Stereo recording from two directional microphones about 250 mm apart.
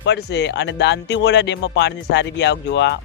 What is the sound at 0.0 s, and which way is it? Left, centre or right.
Speech, left.